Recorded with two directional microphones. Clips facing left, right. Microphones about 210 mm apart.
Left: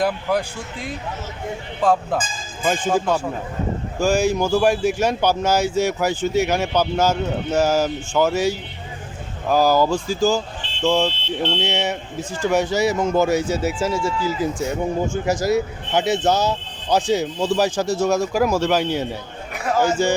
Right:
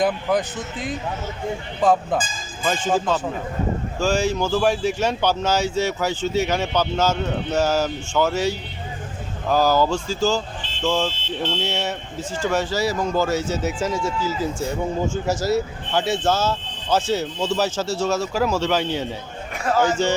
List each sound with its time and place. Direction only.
0.0 s speech: 5° left (ahead or behind)
1.8 s speech: 5° left (ahead or behind)
11.1 s speech: 45° right (ahead or behind)
11.5 s a man's voice: 15° left (ahead or behind)